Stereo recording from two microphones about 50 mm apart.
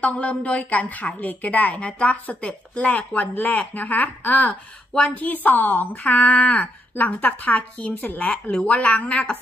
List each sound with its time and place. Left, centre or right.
0.0 s a woman's voice: left
8.3 s speech: centre
8.6 s a woman's voice: left